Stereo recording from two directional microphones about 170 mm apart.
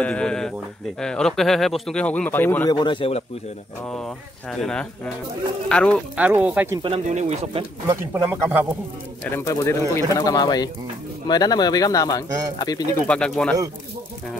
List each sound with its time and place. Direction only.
0.0 s speech: 5° left (ahead or behind)
2.7 s speech: 25° left (ahead or behind)
3.8 s speech: 5° left (ahead or behind)
6.1 s speech: 10° right (ahead or behind)
7.1 s speech: 40° right (ahead or behind)
7.9 s speech: 10° right (ahead or behind)
9.2 s speech: 15° left (ahead or behind)
13.0 s speech: 5° left (ahead or behind)